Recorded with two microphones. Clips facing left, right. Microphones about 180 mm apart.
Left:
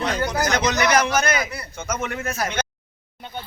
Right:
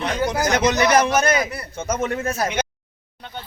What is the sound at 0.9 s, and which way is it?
A man's voice, 30° right (ahead or behind).